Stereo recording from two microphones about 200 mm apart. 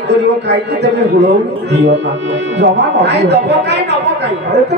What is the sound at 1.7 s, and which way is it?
Speech, 60° right (ahead or behind).